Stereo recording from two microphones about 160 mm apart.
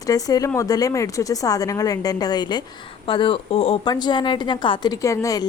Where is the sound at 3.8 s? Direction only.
25° left (ahead or behind).